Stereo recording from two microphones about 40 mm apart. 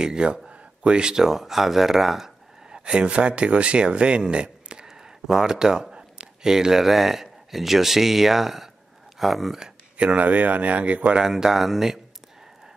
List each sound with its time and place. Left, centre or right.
0.0 s speech: right
2.7 s speech: right
4.8 s speech: centre
9.9 s speech: right
11.1 s speech: centre